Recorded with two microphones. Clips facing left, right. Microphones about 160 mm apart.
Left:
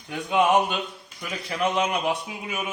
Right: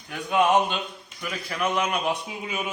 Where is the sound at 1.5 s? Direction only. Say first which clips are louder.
Left 2 dB; 25° left (ahead or behind).